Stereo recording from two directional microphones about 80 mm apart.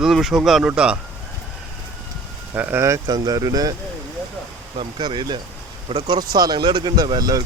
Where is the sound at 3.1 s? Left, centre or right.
Right.